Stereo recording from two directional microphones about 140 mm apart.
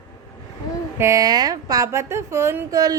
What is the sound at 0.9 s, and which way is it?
A woman's voice, 20° right (ahead or behind).